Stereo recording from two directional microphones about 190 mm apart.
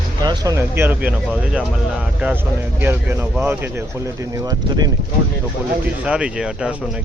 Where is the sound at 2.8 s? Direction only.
10° right (ahead or behind).